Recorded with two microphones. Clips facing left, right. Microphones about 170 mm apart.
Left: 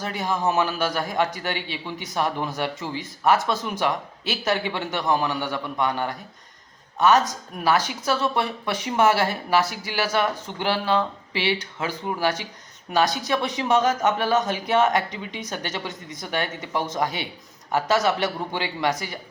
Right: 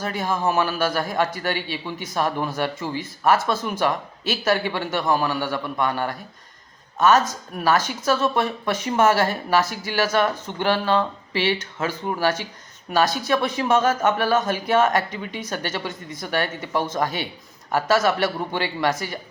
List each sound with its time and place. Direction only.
0.0 s speech: 15° left (ahead or behind)
8.4 s speech: 45° right (ahead or behind)
9.0 s speech: 10° left (ahead or behind)